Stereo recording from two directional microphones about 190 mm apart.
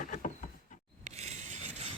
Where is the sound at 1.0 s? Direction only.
35° right (ahead or behind).